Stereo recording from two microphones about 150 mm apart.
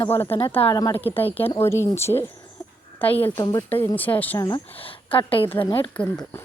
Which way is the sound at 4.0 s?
10° left (ahead or behind).